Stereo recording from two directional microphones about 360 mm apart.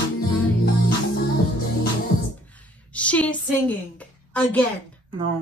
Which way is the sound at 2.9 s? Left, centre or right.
Centre.